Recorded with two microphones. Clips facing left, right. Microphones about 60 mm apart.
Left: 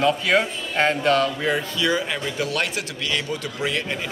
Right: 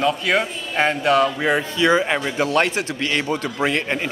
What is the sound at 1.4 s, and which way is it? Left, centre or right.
A man's voice, right.